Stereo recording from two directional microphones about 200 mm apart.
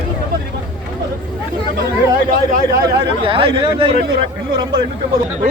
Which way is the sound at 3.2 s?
25° right (ahead or behind).